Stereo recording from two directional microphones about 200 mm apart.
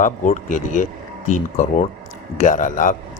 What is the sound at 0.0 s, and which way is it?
Speech, 40° left (ahead or behind).